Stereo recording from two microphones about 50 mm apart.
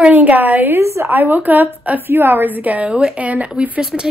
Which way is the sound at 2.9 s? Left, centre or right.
Right.